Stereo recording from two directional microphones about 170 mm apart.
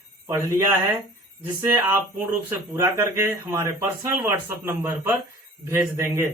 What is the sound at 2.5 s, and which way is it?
Speech, 15° right (ahead or behind).